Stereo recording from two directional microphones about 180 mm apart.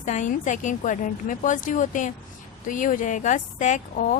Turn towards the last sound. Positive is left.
turn(degrees=45)  # may be behind; listen again after turning